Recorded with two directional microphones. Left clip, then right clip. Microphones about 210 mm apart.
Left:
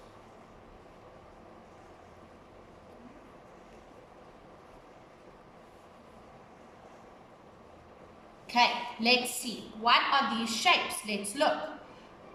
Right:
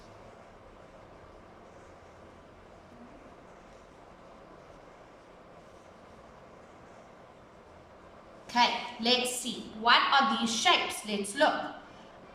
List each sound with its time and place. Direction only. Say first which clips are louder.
8.4 s a woman's voice: even; 10° left (ahead or behind)